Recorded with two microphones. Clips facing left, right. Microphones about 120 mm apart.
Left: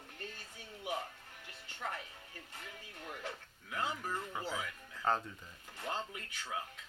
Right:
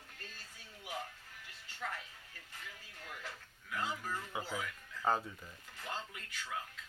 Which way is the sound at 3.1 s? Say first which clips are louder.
Left 4 dB; 50° left (ahead or behind).